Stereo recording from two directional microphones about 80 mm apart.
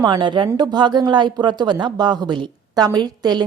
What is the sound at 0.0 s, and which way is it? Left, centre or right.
A woman's voice, right.